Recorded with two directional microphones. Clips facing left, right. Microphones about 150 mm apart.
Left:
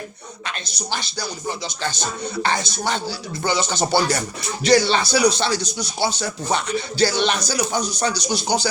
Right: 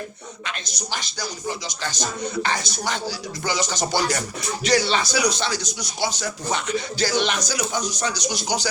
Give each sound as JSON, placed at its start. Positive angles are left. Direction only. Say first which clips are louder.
{"t": 0.4, "sound": "speech", "louder": "left 3 dB", "side_deg": 30}